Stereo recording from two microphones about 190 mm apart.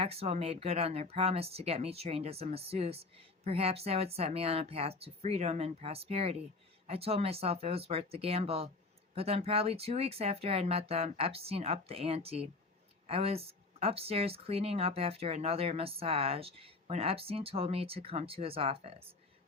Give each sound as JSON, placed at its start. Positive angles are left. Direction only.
{"t": 0.0, "sound": "speech", "side_deg": -30}